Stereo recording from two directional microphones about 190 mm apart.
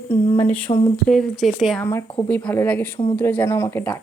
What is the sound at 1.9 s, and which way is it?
Speech, 10° left (ahead or behind).